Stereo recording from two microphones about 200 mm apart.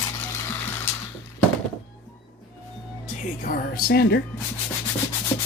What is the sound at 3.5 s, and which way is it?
Speech, 50° left (ahead or behind).